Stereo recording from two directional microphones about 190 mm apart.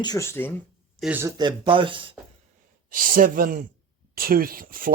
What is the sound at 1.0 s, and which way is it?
Speech, 10° right (ahead or behind).